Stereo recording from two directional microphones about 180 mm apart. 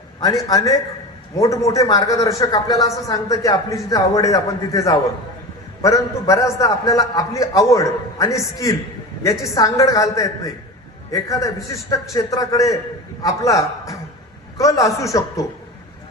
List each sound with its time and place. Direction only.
0.2 s a man's voice: 20° left (ahead or behind)
14.6 s a man's voice: 20° left (ahead or behind)